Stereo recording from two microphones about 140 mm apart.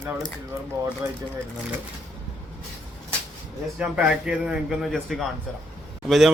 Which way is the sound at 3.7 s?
5° right (ahead or behind).